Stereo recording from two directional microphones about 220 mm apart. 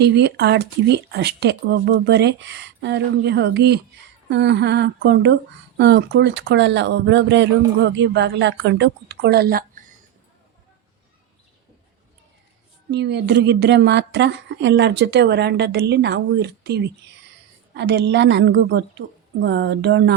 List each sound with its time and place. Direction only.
0.0 s a woman's voice: 50° right (ahead or behind)
12.9 s a woman's voice: 50° right (ahead or behind)